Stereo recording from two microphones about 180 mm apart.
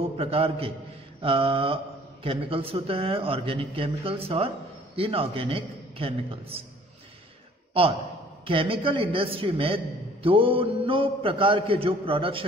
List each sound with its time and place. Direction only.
0.0 s a man's voice: 35° right (ahead or behind)
8.5 s a man's voice: 30° right (ahead or behind)